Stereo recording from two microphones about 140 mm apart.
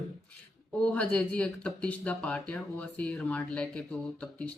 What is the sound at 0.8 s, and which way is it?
Speech, 10° left (ahead or behind).